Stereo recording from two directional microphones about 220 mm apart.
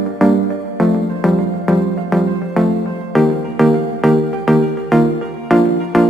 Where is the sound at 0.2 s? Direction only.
Centre (ahead or behind).